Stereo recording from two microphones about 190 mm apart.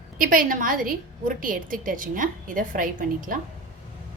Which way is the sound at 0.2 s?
45° right (ahead or behind).